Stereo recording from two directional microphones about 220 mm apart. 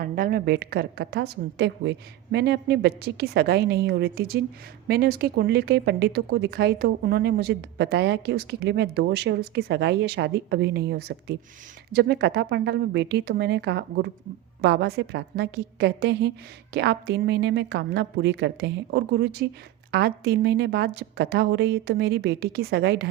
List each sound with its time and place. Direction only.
0.0 s speech: 40° right (ahead or behind)